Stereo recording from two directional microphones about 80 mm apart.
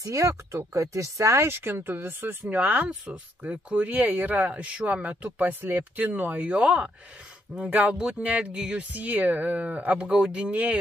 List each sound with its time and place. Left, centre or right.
0.0 s speech: right; by 10.8 s centre